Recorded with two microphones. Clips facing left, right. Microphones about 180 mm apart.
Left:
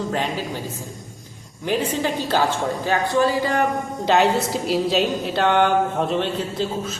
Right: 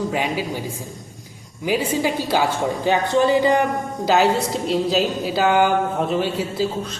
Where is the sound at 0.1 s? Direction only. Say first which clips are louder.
Right 2 dB; 10° right (ahead or behind).